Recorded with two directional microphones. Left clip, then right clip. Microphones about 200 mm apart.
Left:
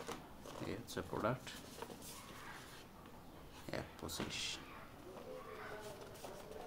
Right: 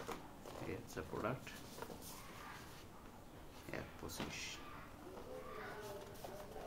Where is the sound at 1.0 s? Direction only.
50° left (ahead or behind).